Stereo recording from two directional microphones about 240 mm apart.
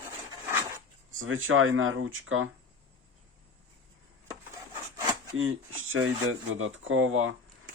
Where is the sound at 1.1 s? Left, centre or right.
Right.